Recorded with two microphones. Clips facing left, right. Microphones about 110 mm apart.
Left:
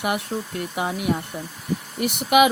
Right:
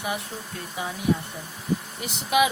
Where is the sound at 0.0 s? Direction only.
65° left (ahead or behind).